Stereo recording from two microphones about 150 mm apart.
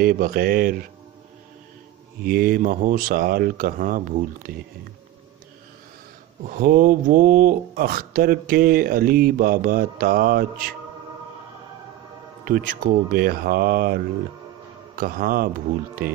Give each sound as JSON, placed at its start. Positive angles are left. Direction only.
{"t": 0.0, "sound": "speech", "side_deg": -70}
{"t": 2.2, "sound": "speech", "side_deg": -75}
{"t": 6.4, "sound": "speech", "side_deg": -65}
{"t": 12.4, "sound": "speech", "side_deg": -65}